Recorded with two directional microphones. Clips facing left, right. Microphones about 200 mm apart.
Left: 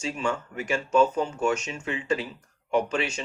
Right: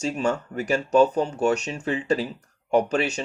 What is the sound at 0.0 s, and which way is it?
Speech, 40° right (ahead or behind).